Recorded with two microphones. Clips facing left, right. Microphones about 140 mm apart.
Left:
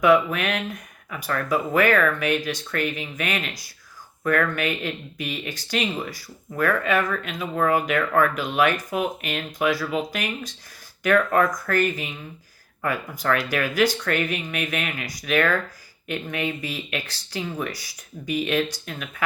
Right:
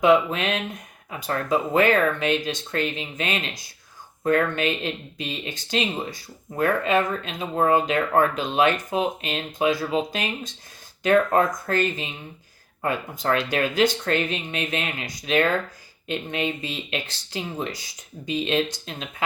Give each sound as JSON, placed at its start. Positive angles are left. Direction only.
{"t": 0.0, "sound": "speech", "side_deg": -20}